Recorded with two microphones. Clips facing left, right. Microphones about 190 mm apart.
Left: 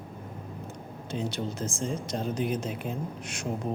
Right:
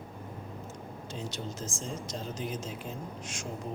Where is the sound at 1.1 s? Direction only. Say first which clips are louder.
Left 7 dB; 60° left (ahead or behind).